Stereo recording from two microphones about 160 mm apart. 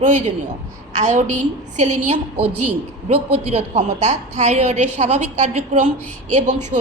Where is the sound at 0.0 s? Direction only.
50° right (ahead or behind).